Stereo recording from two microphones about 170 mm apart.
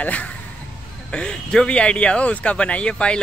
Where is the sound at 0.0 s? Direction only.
10° left (ahead or behind).